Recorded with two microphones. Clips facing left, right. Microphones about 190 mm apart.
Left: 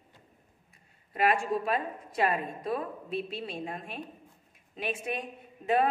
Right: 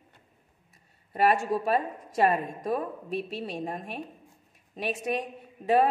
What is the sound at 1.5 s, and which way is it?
A woman's voice, 40° right (ahead or behind).